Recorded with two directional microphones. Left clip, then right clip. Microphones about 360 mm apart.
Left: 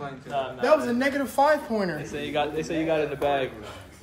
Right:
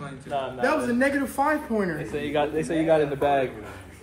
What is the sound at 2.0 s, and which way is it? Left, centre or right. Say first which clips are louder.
A man's voice: right 2 dB; centre.